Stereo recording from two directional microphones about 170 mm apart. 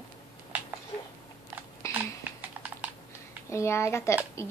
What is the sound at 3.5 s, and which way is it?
Speech, 15° left (ahead or behind).